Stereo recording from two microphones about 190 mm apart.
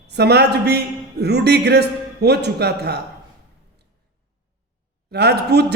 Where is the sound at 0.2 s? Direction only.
60° right (ahead or behind).